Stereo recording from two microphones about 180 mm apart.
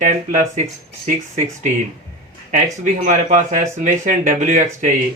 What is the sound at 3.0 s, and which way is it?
Speech, 45° right (ahead or behind).